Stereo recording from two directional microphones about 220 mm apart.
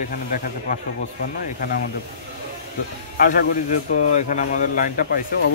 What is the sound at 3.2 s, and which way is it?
A man's voice, 35° left (ahead or behind).